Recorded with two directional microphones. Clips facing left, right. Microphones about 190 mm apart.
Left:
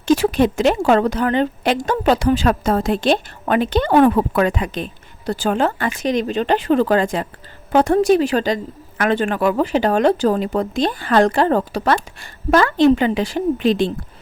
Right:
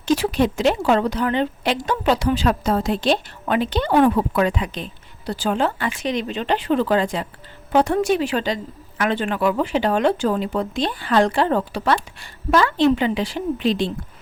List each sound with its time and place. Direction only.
0.0 s a woman's voice: 50° left (ahead or behind)